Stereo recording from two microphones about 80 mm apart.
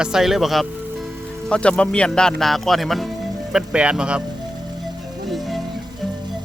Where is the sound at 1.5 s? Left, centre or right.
Centre.